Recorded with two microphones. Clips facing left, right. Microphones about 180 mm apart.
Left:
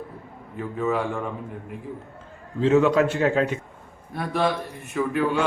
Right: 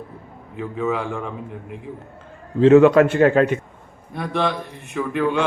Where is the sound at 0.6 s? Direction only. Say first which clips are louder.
Right 1 dB; centre (ahead or behind).